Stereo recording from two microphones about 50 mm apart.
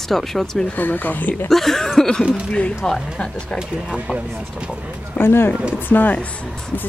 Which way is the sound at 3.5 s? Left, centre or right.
Centre.